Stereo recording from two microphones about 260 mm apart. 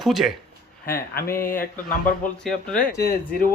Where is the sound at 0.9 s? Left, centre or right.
Left.